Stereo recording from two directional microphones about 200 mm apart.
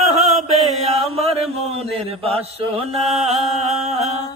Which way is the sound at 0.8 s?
30° right (ahead or behind).